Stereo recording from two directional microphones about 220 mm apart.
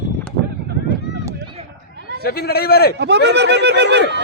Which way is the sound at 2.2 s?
45° left (ahead or behind).